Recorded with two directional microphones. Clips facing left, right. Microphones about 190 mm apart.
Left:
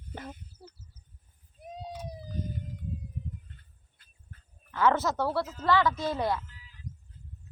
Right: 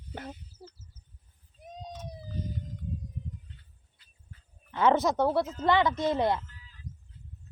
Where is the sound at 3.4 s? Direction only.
50° left (ahead or behind).